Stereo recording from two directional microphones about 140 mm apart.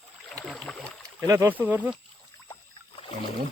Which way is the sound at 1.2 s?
20° right (ahead or behind).